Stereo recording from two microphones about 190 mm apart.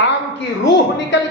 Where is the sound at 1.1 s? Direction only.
75° left (ahead or behind).